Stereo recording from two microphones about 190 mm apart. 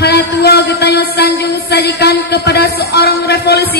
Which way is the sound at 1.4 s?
55° left (ahead or behind).